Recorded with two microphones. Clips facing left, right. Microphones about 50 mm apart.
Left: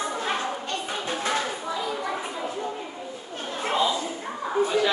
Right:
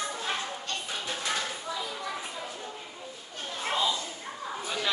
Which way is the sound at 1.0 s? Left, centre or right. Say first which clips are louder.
Left 6 dB; left.